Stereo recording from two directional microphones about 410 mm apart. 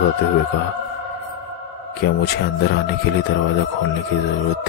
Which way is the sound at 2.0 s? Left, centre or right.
Left.